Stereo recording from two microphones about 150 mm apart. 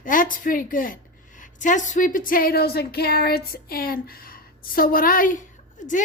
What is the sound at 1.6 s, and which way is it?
A woman's voice, 55° left (ahead or behind).